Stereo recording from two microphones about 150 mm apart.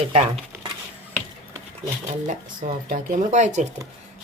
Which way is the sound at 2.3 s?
60° right (ahead or behind).